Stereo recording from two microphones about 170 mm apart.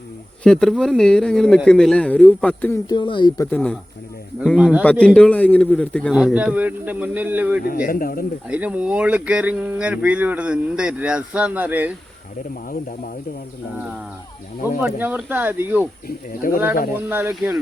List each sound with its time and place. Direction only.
0.4 s a man's voice: 5° left (ahead or behind)
2.9 s speech: 25° left (ahead or behind)
3.4 s a man's voice: 5° left (ahead or behind)
4.4 s a man's voice: 5° right (ahead or behind)
4.8 s a man's voice: 5° left (ahead or behind)
6.1 s speech: 5° right (ahead or behind)
7.6 s speech: 60° left (ahead or behind)
8.4 s speech: 10° right (ahead or behind)
14.8 s speech: 10° right (ahead or behind)
16.0 s speech: 60° left (ahead or behind)
17.1 s speech: 15° right (ahead or behind)